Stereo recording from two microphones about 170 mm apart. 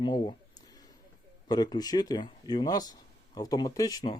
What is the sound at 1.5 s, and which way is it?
Speech, 25° left (ahead or behind).